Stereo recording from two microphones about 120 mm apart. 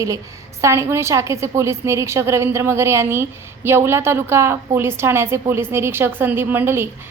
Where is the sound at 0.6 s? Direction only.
20° right (ahead or behind).